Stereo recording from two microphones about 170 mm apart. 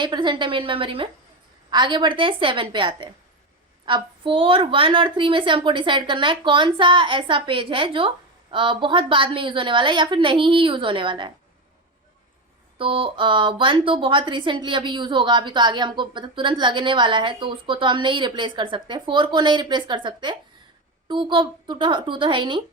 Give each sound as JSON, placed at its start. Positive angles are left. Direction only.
{"t": 0.0, "sound": "a woman's voice", "side_deg": -25}
{"t": 12.8, "sound": "a woman's voice", "side_deg": -30}